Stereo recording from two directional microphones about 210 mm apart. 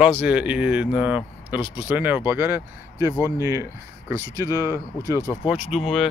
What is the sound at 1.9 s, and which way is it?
Speech, 10° right (ahead or behind).